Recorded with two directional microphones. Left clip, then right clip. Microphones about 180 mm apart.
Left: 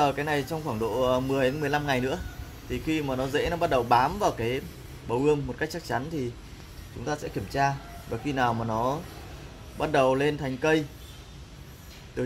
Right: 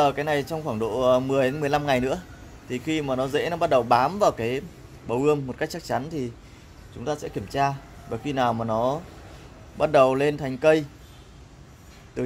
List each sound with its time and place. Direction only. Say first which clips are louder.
0.0 s speech: right 3 dB; 55° right (ahead or behind)
7.3 s speech: right 1 dB; 50° right (ahead or behind)